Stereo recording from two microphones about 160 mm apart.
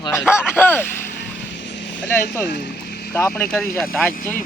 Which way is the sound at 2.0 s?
10° left (ahead or behind).